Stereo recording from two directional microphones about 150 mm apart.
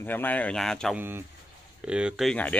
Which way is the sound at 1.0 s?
15° right (ahead or behind).